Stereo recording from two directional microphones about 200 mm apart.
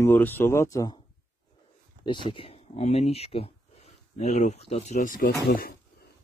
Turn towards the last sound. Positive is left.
turn(degrees=50)  # may be behind; listen again after turning